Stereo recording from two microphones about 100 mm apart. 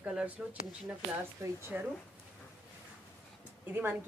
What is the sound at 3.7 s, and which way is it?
Speech, 20° right (ahead or behind).